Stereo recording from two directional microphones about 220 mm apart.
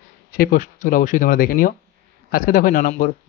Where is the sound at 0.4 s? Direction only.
40° left (ahead or behind).